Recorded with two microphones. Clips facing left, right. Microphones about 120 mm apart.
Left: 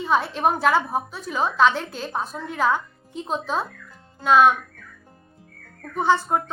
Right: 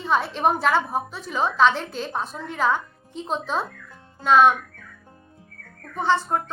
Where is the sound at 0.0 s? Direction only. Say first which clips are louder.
Even; centre (ahead or behind).